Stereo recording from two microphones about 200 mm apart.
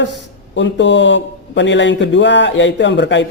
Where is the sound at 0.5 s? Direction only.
65° left (ahead or behind).